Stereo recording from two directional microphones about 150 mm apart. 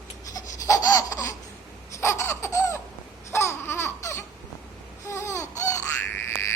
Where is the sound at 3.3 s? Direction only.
20° left (ahead or behind).